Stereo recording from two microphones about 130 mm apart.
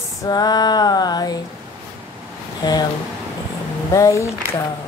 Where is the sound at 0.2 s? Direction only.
30° left (ahead or behind).